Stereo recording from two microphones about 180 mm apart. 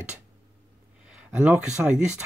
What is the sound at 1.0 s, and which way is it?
Speech, 5° right (ahead or behind).